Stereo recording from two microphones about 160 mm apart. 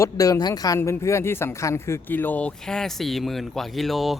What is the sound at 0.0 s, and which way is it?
Speech, 20° left (ahead or behind).